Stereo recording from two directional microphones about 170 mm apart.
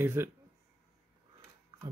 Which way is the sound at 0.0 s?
15° right (ahead or behind).